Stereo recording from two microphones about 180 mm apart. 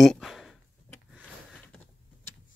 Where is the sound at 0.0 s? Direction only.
Centre (ahead or behind).